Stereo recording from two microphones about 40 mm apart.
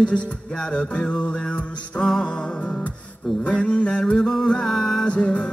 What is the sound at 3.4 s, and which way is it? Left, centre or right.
Music, left.